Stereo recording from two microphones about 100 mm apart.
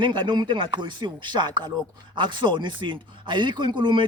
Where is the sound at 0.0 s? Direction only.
50° right (ahead or behind).